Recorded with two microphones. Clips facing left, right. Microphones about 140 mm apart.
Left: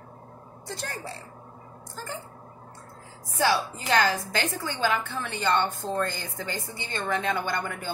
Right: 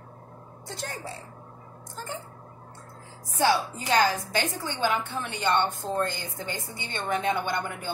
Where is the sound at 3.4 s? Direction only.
15° right (ahead or behind).